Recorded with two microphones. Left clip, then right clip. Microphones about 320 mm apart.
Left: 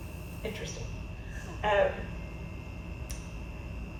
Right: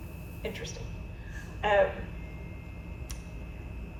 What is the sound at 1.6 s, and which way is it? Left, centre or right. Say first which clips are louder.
Speech: right 2 dB; right.